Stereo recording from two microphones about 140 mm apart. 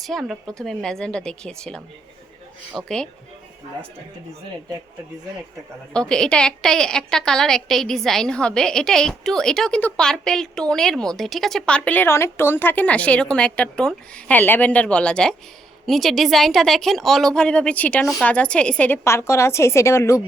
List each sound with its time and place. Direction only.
0.0 s a woman's voice: centre (ahead or behind)
5.9 s a woman's voice: 5° left (ahead or behind)
11.9 s a woman's voice: 15° left (ahead or behind)